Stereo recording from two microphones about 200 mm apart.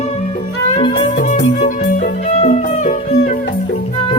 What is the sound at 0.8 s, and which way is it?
Music, 25° left (ahead or behind).